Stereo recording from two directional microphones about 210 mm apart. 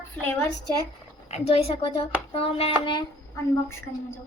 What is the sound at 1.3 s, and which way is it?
A woman's voice, 30° left (ahead or behind).